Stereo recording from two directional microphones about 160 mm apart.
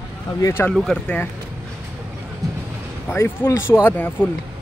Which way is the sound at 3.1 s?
15° left (ahead or behind).